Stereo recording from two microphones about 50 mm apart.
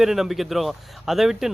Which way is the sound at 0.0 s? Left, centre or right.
Centre.